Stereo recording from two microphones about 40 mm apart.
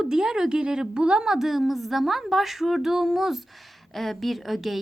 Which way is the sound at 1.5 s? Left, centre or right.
Centre.